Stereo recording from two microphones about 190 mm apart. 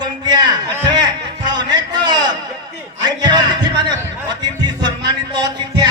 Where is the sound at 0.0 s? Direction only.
20° right (ahead or behind).